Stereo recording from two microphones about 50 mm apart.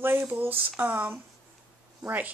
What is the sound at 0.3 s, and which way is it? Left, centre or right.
Speech, right.